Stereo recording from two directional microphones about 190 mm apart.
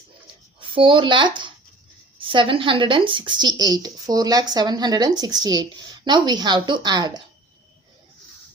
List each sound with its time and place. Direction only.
0.7 s a woman's voice: 25° right (ahead or behind)